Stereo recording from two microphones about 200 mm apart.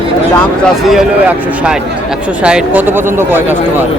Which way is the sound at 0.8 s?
Centre (ahead or behind).